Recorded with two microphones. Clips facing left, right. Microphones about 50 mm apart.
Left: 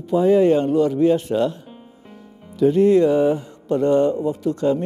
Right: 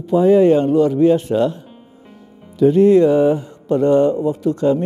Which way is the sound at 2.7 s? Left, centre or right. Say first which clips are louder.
Right 4 dB; right.